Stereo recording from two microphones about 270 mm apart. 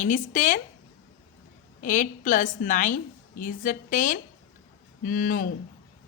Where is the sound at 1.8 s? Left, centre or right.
Left.